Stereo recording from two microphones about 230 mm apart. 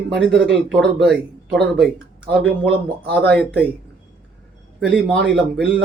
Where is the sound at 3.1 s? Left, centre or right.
Centre.